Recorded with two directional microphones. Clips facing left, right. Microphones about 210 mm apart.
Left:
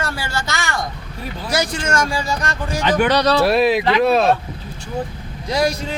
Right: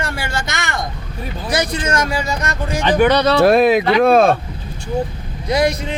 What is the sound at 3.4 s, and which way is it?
Speech, 50° right (ahead or behind).